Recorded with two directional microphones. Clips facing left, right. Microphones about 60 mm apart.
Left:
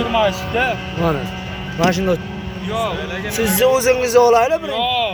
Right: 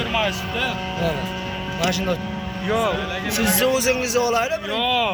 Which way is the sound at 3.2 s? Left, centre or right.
Centre.